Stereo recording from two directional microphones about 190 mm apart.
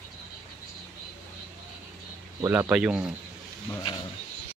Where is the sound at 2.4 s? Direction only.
10° right (ahead or behind).